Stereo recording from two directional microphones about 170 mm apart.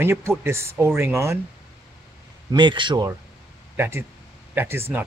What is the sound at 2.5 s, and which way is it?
Speech, 25° right (ahead or behind).